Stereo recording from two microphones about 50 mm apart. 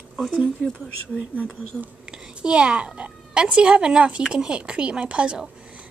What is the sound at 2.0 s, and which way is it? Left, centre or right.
A woman's voice, centre.